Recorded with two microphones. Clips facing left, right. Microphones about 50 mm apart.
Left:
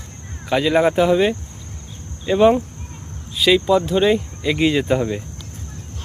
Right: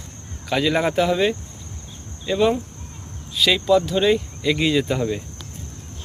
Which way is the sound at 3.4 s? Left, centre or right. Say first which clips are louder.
Left 2 dB; centre.